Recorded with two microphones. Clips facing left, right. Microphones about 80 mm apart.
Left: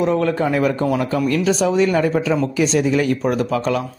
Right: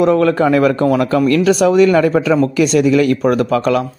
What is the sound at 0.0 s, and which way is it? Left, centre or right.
Speech, right.